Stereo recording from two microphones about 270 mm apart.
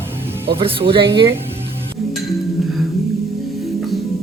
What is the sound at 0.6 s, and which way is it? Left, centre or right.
Speech, centre.